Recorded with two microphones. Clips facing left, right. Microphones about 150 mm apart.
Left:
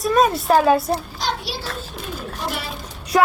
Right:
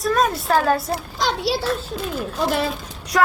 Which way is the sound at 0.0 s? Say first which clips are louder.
Left 2 dB; centre (ahead or behind).